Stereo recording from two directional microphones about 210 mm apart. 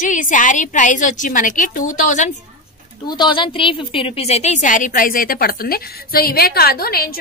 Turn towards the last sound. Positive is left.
turn(degrees=45)  # may be behind; listen again after turning